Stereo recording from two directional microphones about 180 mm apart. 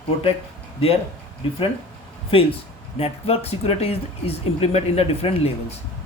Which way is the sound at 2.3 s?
30° left (ahead or behind).